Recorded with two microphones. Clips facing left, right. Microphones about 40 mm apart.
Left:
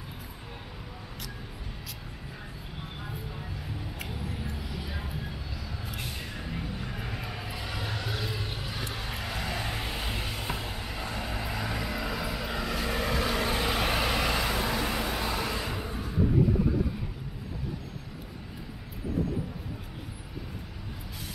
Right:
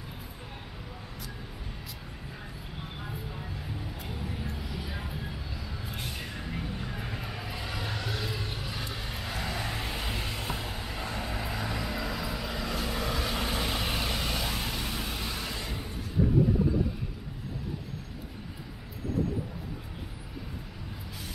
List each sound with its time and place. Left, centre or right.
2.8 s vehicle: centre
4.1 s a sound: centre
7.2 s vehicle: centre
12.8 s vehicle: left
13.1 s vehicle: centre
13.8 s vehicle: left
14.1 s vehicle: left
14.4 s vehicle: left
15.4 s a sound: left